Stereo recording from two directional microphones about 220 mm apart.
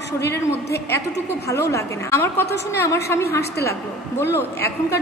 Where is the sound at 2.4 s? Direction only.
50° left (ahead or behind).